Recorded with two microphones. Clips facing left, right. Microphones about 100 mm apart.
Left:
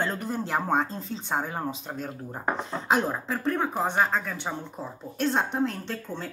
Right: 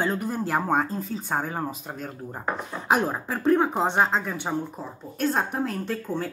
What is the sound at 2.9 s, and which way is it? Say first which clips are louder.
Speech: right 2 dB; 10° right (ahead or behind).